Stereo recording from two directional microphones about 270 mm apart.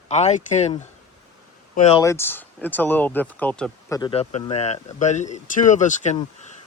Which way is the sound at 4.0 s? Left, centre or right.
Left.